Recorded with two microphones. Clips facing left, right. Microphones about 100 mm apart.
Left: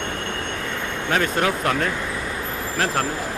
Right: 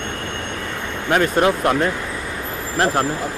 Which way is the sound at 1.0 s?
15° right (ahead or behind).